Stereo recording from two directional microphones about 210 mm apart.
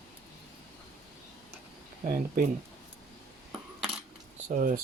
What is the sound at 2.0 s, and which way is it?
Speech, 45° right (ahead or behind).